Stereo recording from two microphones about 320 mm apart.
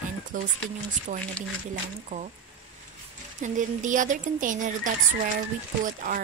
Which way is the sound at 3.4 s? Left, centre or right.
Right.